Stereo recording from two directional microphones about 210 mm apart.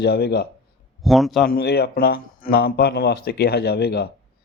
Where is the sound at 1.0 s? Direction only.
Centre (ahead or behind).